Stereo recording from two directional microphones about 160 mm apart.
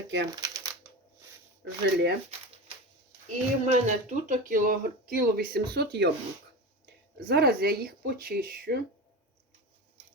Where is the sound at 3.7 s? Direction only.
50° right (ahead or behind); by 5.6 s 70° right (ahead or behind).